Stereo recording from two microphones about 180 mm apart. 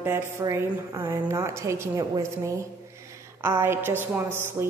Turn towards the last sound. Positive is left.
turn(degrees=-15)  # may be behind; listen again after turning